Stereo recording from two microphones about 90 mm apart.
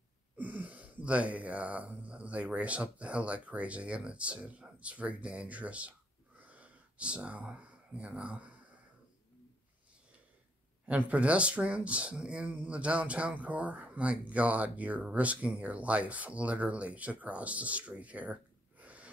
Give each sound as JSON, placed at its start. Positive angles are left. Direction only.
{"t": 0.4, "sound": "speech", "side_deg": -15}
{"t": 6.4, "sound": "a sound", "side_deg": -15}
{"t": 10.9, "sound": "speech", "side_deg": -15}